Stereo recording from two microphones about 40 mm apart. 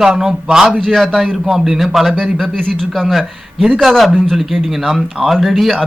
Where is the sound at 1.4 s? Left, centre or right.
Centre.